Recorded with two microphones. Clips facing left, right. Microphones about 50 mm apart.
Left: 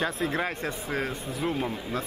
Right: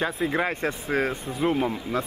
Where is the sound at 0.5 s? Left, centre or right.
Right.